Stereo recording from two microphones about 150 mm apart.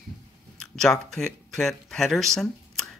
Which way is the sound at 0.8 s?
5° left (ahead or behind).